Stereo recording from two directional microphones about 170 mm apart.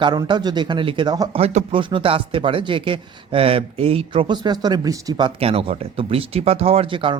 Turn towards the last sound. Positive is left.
turn(degrees=-30)  # may be behind; listen again after turning